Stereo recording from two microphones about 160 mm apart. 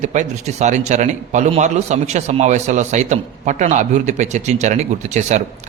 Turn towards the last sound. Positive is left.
turn(degrees=-45)  # may be behind; listen again after turning